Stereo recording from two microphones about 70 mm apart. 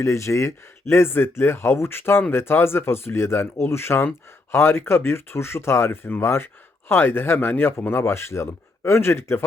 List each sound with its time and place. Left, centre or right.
0.0 s speech: left